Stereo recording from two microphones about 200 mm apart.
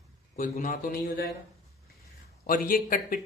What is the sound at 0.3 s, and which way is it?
Speech, 40° left (ahead or behind).